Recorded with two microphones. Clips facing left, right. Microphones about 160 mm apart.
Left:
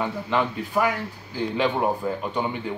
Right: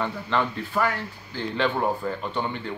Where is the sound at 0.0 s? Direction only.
10° left (ahead or behind).